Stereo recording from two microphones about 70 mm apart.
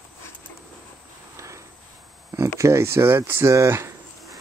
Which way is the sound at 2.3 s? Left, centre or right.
Right.